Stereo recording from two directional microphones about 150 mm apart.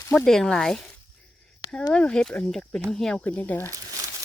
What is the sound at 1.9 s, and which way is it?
Speech, 5° left (ahead or behind).